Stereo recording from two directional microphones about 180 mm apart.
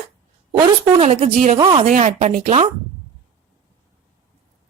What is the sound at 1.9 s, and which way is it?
Speech, 45° right (ahead or behind).